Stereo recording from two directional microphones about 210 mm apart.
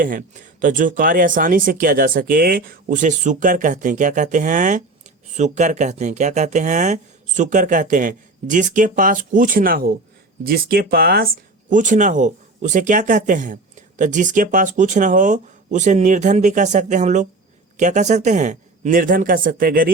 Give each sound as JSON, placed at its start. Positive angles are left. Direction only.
{"t": 0.0, "sound": "speech", "side_deg": -40}